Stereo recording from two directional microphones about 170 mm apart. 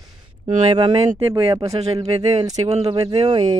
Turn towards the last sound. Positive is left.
turn(degrees=-30)  # may be behind; listen again after turning